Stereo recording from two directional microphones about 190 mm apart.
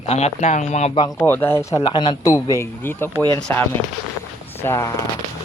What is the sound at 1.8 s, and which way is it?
Speech, 25° left (ahead or behind).